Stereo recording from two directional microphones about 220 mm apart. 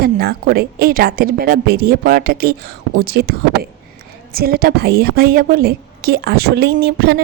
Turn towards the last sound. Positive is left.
turn(degrees=-45)  # may be behind; listen again after turning